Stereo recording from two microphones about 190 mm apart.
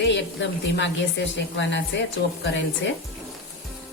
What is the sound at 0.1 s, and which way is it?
A woman's voice, 70° left (ahead or behind).